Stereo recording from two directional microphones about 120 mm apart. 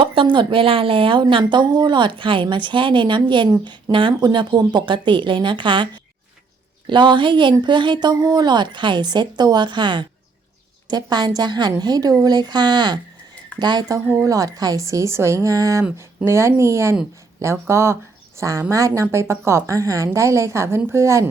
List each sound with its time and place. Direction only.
0.0 s a woman's voice: 45° right (ahead or behind); by 21.2 s 25° right (ahead or behind)